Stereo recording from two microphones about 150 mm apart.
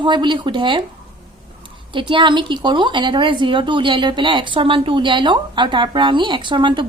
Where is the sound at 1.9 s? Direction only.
35° right (ahead or behind).